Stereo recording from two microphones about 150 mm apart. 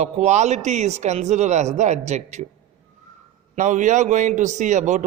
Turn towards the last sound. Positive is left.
turn(degrees=-55)  # may be behind; listen again after turning